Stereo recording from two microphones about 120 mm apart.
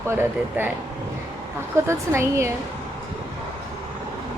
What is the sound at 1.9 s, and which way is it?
Speech, 20° right (ahead or behind).